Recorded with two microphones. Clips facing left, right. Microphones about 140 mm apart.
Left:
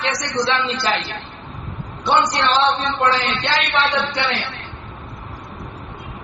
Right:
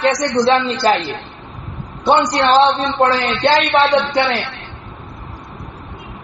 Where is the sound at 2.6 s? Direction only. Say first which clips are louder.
Right 5 dB; 45° right (ahead or behind).